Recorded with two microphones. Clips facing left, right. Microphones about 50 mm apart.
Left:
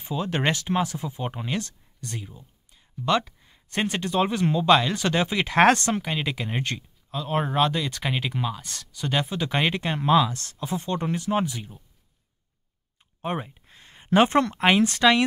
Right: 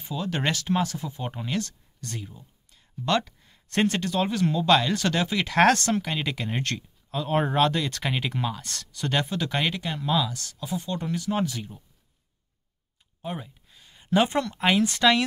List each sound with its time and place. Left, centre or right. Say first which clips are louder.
0.1 s speech: left 2 dB; left
6.0 s speech: left 1 dB; centre
7.1 s speech: right 1 dB; centre; by 11.4 s left
11.4 s speech: right 1 dB; centre
13.2 s a sound: left 5 dB; left
15.0 s speech: left 2 dB; left